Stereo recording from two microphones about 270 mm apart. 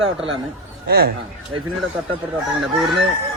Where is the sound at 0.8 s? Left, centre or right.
Right.